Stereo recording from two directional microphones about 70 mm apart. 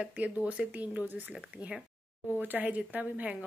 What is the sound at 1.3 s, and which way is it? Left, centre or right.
Speech, centre.